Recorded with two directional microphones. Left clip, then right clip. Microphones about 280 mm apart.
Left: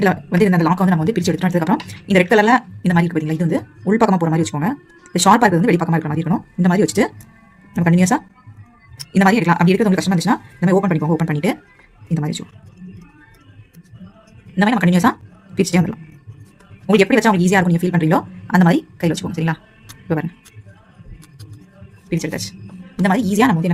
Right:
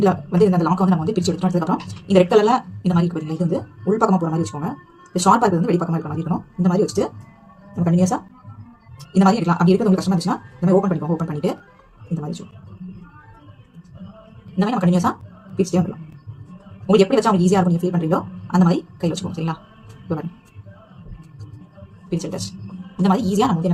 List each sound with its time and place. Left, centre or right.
0.0 s speech: left
14.5 s speech: left
16.8 s speech: left
22.1 s a woman's voice: left